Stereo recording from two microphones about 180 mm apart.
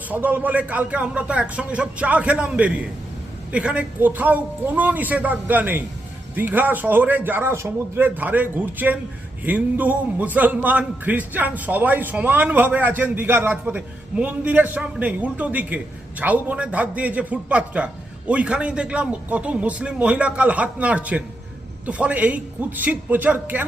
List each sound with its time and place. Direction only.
0.1 s a man's voice: 10° right (ahead or behind)